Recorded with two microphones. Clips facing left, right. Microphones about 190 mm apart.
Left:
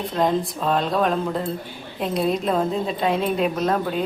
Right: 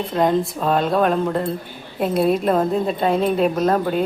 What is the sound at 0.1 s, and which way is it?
Speech, centre (ahead or behind).